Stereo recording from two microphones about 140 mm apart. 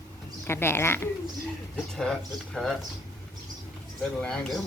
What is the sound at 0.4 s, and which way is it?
Speech, 15° left (ahead or behind).